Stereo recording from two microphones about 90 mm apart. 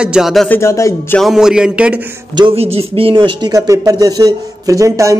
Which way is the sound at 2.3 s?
75° right (ahead or behind).